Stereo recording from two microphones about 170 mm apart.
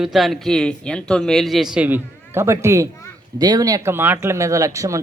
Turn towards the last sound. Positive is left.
turn(degrees=-20)  # may be behind; listen again after turning